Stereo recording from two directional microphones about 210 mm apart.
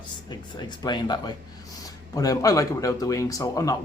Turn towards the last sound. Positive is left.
turn(degrees=15)  # may be behind; listen again after turning